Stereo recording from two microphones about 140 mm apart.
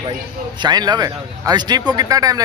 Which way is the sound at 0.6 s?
30° right (ahead or behind).